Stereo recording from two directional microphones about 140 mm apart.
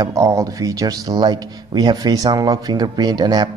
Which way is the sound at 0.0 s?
25° right (ahead or behind).